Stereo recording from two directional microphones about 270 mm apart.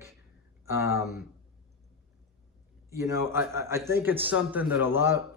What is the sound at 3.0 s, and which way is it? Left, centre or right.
A man's voice, centre.